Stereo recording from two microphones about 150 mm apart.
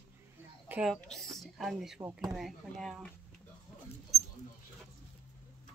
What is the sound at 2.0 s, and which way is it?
Speech, 20° right (ahead or behind).